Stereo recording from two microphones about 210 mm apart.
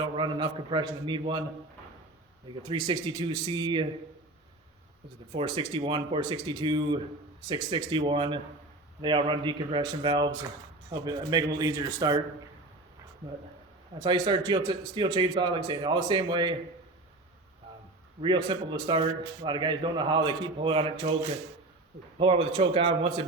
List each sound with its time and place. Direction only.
0.0 s a man's voice: 20° right (ahead or behind)
2.6 s a man's voice: 20° right (ahead or behind)
5.3 s a man's voice: 25° right (ahead or behind)
14.0 s a man's voice: 20° right (ahead or behind)
18.2 s a man's voice: 20° right (ahead or behind)
22.2 s a man's voice: 25° right (ahead or behind)